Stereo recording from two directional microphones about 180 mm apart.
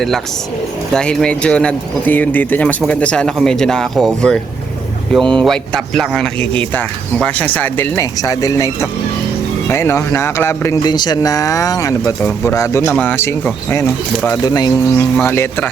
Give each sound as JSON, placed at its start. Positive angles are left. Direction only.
{"t": 0.9, "sound": "speech", "side_deg": 5}